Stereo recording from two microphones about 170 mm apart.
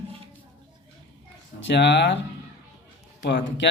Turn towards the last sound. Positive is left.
turn(degrees=90)